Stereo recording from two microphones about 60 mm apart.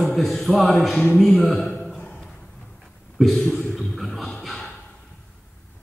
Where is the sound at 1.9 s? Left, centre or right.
Centre.